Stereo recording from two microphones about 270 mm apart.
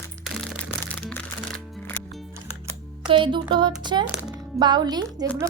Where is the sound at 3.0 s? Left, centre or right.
Centre.